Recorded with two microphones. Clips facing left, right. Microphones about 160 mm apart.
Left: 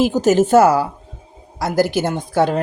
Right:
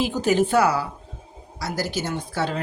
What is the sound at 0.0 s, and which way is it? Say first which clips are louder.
Speech: left 6 dB; 45° left (ahead or behind).